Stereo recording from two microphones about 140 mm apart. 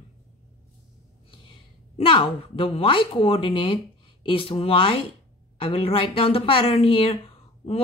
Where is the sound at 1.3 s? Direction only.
35° left (ahead or behind).